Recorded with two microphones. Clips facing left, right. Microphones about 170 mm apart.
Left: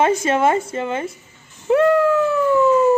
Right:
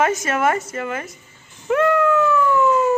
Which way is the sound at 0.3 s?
25° left (ahead or behind).